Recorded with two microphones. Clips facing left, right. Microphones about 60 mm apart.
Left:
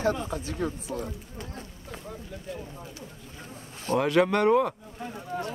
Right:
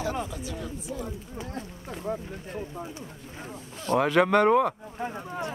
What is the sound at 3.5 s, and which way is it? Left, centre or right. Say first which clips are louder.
Speech: right 2 dB; right.